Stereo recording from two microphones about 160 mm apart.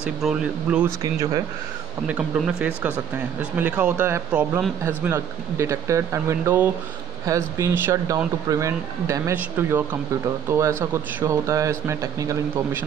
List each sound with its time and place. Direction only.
0.0 s speech: 5° right (ahead or behind)
0.8 s speech: 20° right (ahead or behind)
2.0 s speech: 10° right (ahead or behind)